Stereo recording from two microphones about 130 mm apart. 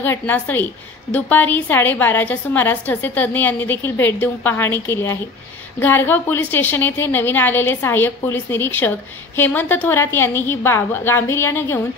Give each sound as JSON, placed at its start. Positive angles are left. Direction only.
{"t": 0.0, "sound": "a woman's voice", "side_deg": 15}